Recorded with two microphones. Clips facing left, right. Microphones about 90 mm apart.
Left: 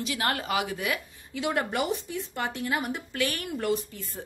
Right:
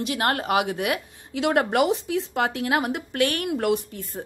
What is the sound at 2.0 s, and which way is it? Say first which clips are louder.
Speech: right 8 dB; 90° right.